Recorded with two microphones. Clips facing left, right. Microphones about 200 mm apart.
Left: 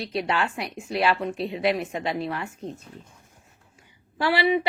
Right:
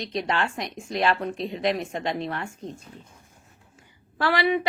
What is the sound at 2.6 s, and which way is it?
Speech, 35° left (ahead or behind).